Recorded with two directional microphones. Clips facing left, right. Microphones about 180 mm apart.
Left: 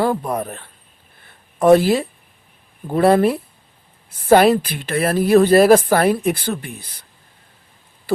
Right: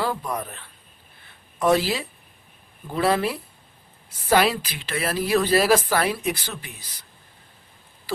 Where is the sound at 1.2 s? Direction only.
55° left (ahead or behind).